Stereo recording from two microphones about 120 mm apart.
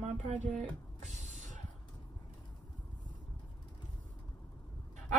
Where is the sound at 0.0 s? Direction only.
65° right (ahead or behind); by 1.6 s 85° right.